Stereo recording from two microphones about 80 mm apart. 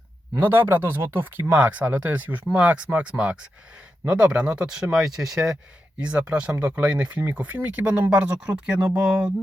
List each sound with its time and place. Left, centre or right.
0.3 s speech: right; by 5.5 s centre
6.0 s speech: centre
8.4 s speech: centre